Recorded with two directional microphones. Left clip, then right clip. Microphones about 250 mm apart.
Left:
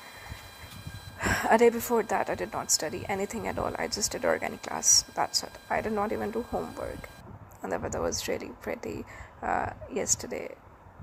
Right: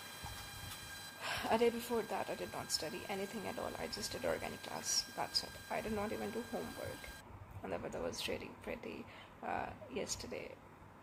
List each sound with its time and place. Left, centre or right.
1.2 s speech: left